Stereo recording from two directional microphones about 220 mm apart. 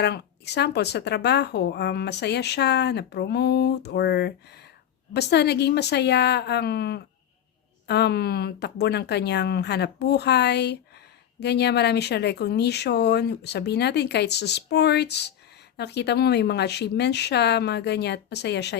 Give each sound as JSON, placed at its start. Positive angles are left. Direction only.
{"t": 0.0, "sound": "speech", "side_deg": 50}